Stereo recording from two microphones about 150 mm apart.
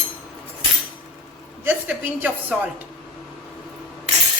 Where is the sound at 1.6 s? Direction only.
10° right (ahead or behind).